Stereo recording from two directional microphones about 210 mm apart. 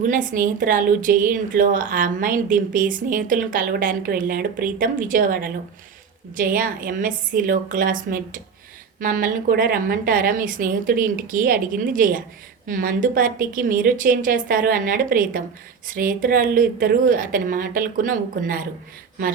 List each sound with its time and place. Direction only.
0.0 s a woman's voice: 40° right (ahead or behind)